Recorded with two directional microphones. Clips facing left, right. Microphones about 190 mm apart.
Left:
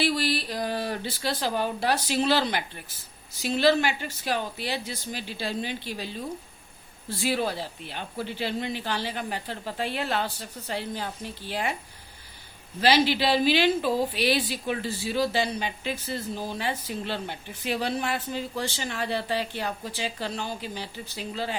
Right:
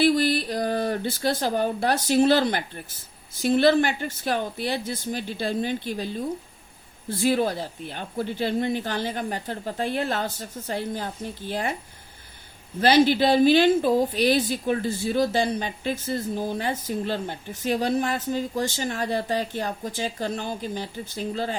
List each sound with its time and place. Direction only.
0.0 s speech: 50° right (ahead or behind)
12.8 s speech: 50° right (ahead or behind)